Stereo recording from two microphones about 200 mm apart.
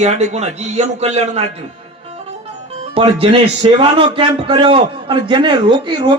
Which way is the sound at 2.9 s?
30° right (ahead or behind).